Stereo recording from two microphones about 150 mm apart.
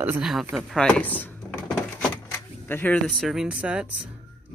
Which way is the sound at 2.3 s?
15° left (ahead or behind).